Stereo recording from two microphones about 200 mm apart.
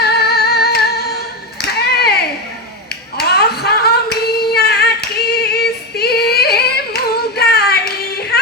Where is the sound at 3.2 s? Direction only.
55° left (ahead or behind).